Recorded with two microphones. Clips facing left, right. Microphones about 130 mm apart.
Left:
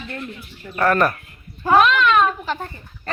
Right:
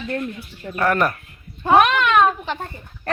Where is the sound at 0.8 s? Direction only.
15° right (ahead or behind).